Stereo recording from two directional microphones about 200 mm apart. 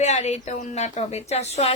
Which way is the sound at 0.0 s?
35° left (ahead or behind).